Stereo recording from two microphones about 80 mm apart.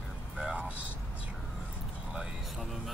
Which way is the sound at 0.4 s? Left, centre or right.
Centre.